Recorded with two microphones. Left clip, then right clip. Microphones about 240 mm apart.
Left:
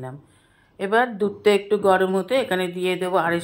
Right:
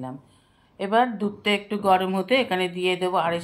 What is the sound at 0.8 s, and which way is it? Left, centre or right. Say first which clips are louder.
Speech: left 2 dB; left.